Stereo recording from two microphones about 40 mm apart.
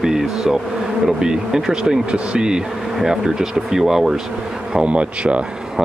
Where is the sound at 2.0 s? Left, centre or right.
Right; by 4.2 s centre.